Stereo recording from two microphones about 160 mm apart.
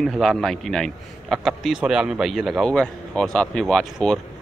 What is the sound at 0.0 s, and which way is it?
A man's voice, centre (ahead or behind).